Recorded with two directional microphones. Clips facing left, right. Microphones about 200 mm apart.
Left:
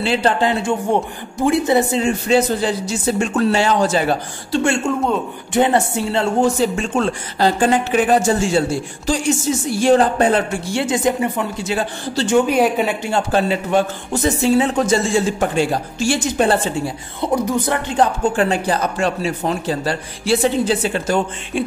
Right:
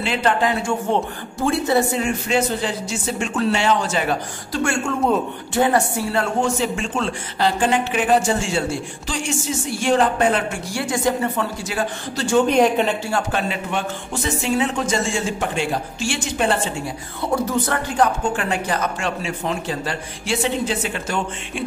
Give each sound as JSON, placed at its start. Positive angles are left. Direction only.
{"t": 0.0, "sound": "speech", "side_deg": 30}
{"t": 6.4, "sound": "speech", "side_deg": 40}
{"t": 11.6, "sound": "speech", "side_deg": 30}
{"t": 12.4, "sound": "speech", "side_deg": 10}
{"t": 13.3, "sound": "speech", "side_deg": 35}
{"t": 17.2, "sound": "speech", "side_deg": 15}
{"t": 17.9, "sound": "speech", "side_deg": 30}